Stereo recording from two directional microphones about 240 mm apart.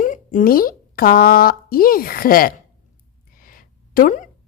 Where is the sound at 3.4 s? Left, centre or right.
Left.